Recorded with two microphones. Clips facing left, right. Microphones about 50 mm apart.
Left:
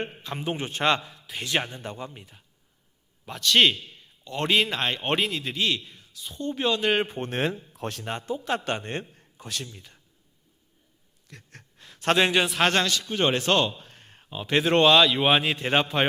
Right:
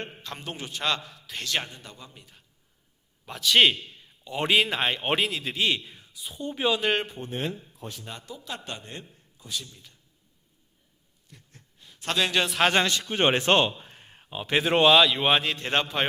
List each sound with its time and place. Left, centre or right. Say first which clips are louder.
0.0 s a man's voice: left 5 dB; centre
0.6 s speech: left 4 dB; left
1.5 s a man's voice: left 3 dB; left
1.8 s speech: left 9 dB; left
3.2 s speech: even; centre
5.7 s speech: even; centre
7.3 s speech: left 4 dB; left
8.0 s a man's voice: left 9 dB; left
9.4 s speech: left 1 dB; left
9.6 s a man's voice: left 5 dB; left
11.3 s a sound: left 6 dB; left
11.9 s a man's voice: left 5 dB; left
12.5 s speech: even; centre
12.9 s speech: right 1 dB; right; by 16.0 s centre